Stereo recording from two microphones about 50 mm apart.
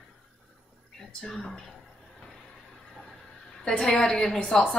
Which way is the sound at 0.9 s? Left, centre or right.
Centre.